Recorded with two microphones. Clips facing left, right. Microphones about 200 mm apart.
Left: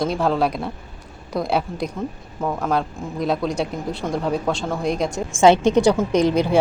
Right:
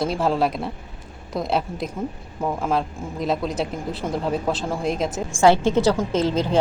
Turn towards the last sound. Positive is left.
turn(degrees=15)  # may be behind; listen again after turning